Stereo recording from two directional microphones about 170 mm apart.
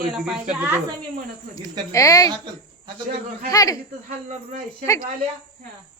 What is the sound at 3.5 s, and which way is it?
Speech, 20° left (ahead or behind).